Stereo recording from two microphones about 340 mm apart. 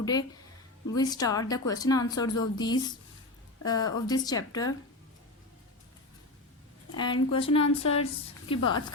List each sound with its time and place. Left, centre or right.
0.0 s a woman's voice: centre
6.9 s a woman's voice: centre